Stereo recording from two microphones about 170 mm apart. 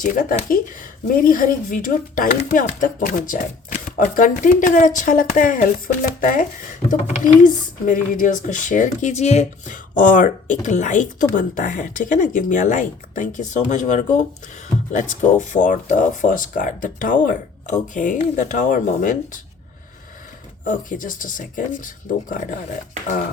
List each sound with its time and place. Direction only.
0.0 s speech: 50° left (ahead or behind)
20.7 s speech: 50° left (ahead or behind)